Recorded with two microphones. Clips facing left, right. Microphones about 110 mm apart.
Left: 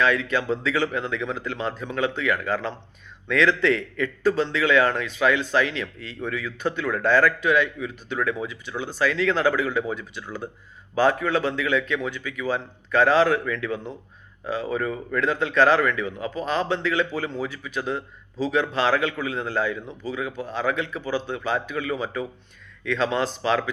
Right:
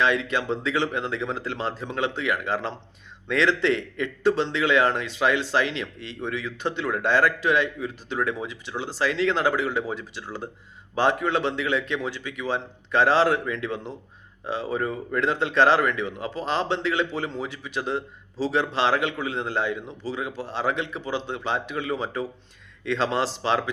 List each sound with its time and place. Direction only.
0.0 s a man's voice: 25° right (ahead or behind)